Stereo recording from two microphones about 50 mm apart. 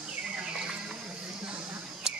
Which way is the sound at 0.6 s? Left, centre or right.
Centre.